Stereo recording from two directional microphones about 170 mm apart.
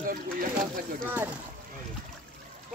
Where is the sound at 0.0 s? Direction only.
55° right (ahead or behind).